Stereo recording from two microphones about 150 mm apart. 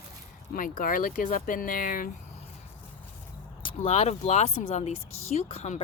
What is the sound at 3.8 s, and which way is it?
Speech, 40° left (ahead or behind).